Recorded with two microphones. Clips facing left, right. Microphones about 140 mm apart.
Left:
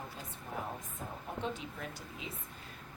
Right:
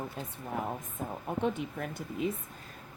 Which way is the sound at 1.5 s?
55° right (ahead or behind).